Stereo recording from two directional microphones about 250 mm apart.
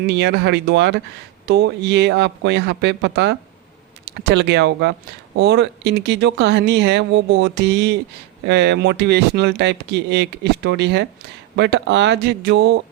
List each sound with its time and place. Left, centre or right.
0.1 s speech: right